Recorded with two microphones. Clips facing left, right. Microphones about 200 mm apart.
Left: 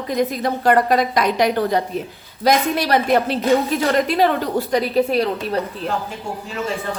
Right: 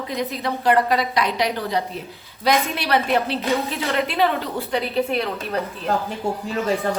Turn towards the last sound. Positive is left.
turn(degrees=40)  # may be behind; listen again after turning